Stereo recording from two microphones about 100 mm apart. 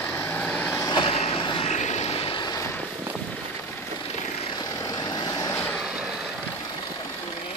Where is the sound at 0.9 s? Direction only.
65° left (ahead or behind).